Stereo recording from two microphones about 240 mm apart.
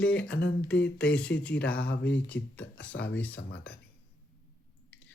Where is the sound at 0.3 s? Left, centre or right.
Left.